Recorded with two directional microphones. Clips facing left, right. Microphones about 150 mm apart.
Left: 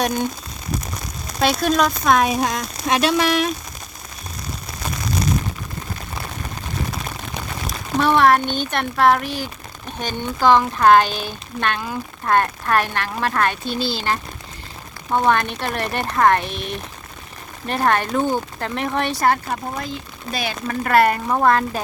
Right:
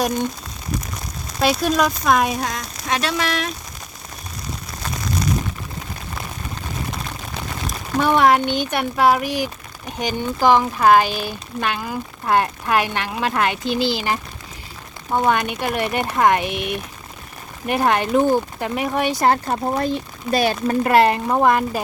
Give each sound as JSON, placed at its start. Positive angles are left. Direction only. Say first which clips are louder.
{"t": 1.4, "sound": "speech", "louder": "even", "side_deg": -5}
{"t": 2.9, "sound": "speech", "louder": "left 4 dB", "side_deg": 10}
{"t": 7.9, "sound": "speech", "louder": "even", "side_deg": -10}
{"t": 19.2, "sound": "speech", "louder": "right 2 dB", "side_deg": -30}
{"t": 20.3, "sound": "speech", "louder": "right 8 dB", "side_deg": -45}
{"t": 20.7, "sound": "a woman's voice", "louder": "even", "side_deg": -20}